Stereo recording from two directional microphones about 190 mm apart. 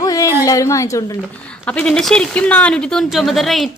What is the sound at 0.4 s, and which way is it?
Speech, 15° left (ahead or behind).